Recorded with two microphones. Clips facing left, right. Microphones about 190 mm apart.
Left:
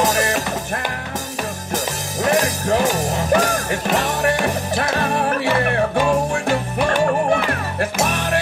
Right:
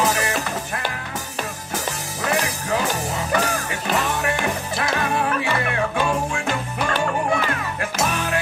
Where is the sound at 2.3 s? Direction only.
40° left (ahead or behind).